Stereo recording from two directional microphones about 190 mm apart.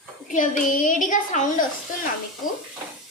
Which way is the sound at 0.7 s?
45° left (ahead or behind).